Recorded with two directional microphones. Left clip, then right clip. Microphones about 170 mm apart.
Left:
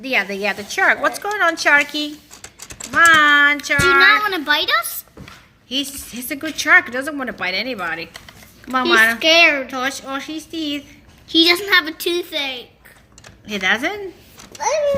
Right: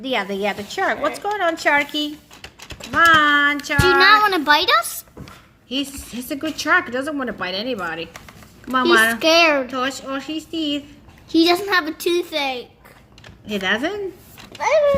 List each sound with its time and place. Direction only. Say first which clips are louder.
0.0 s a woman's voice: left 2 dB; centre (ahead or behind)
4.0 s a child's voice: right 1 dB; 60° right (ahead or behind)
5.6 s a woman's voice: left 2 dB; centre (ahead or behind)
9.1 s a child's voice: left 2 dB; 55° right (ahead or behind)
9.7 s a woman's voice: left 1 dB; 5° right (ahead or behind)
11.3 s a child's voice: left 3 dB; 40° right (ahead or behind)
13.5 s a woman's voice: left 2 dB; 5° right (ahead or behind)